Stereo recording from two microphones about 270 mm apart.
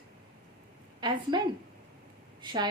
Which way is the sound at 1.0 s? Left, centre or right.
Centre.